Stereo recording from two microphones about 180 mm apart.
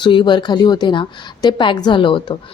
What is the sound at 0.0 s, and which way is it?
A woman's voice, 25° left (ahead or behind).